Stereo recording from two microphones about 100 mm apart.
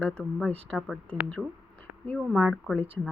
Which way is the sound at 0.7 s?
Centre (ahead or behind).